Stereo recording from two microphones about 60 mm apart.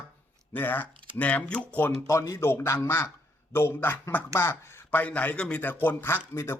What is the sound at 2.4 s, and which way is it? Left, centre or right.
A man's voice, left.